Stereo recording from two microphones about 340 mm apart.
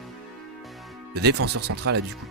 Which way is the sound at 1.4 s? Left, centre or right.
Right.